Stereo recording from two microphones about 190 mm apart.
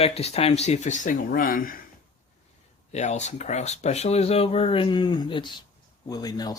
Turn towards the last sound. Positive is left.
turn(degrees=20)  # may be behind; listen again after turning